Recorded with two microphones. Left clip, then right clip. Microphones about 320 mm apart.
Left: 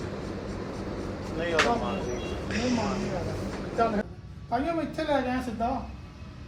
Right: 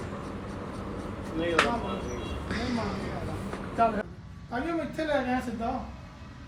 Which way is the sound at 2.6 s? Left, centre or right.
Right.